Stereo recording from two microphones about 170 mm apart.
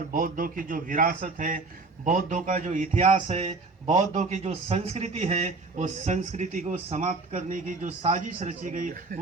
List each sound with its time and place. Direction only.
0.1 s a man's voice: 55° right (ahead or behind)